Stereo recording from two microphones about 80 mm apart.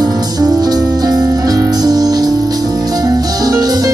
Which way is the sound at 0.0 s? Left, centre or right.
Right.